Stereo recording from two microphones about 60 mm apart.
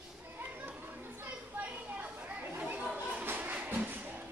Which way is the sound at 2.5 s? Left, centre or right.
Right.